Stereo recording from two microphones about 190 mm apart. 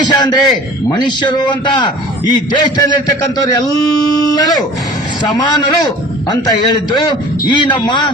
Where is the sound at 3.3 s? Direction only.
20° left (ahead or behind).